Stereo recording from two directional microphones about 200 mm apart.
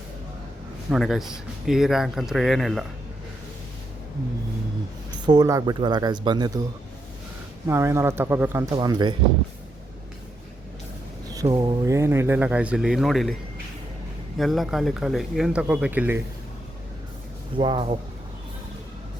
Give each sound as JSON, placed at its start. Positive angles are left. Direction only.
{"t": 0.9, "sound": "speech", "side_deg": 0}
{"t": 5.1, "sound": "speech", "side_deg": -20}
{"t": 7.7, "sound": "speech", "side_deg": -15}
{"t": 11.4, "sound": "speech", "side_deg": -20}
{"t": 14.3, "sound": "speech", "side_deg": 0}
{"t": 17.6, "sound": "speech", "side_deg": -20}